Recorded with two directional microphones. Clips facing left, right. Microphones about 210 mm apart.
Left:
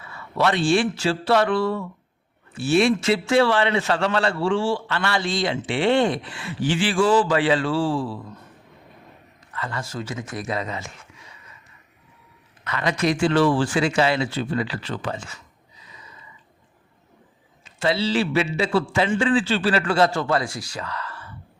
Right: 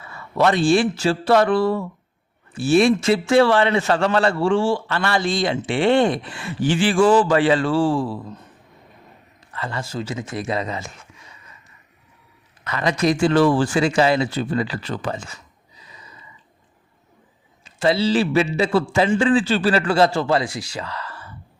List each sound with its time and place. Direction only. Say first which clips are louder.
0.3 s a man's voice: right 3 dB; 40° right (ahead or behind)
9.6 s a man's voice: right 3 dB; 30° right (ahead or behind)
12.6 s a man's voice: right 3 dB; 35° right (ahead or behind)
17.7 s a man's voice: right 4 dB; 40° right (ahead or behind)